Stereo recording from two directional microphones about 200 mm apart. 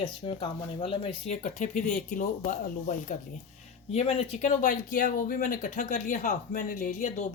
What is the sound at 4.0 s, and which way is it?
Speech, 30° left (ahead or behind).